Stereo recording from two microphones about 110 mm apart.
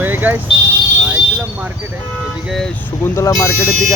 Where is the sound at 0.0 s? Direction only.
15° right (ahead or behind).